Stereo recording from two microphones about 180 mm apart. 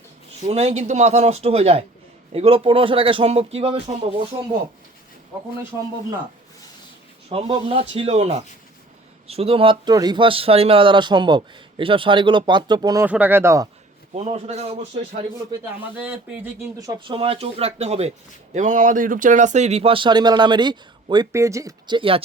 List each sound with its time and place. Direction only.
0.4 s speech: 35° right (ahead or behind)
7.3 s speech: 30° right (ahead or behind)
13.1 s speech: 10° right (ahead or behind)
14.1 s speech: 35° right (ahead or behind)
16.0 s speech: 10° right (ahead or behind)
16.8 s speech: 25° right (ahead or behind)